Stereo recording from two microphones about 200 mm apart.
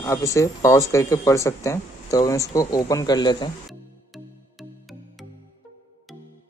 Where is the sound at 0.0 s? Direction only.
15° left (ahead or behind).